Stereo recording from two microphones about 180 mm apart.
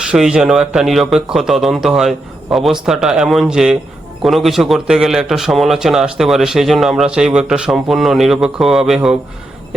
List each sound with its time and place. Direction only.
0.1 s speech: 5° right (ahead or behind)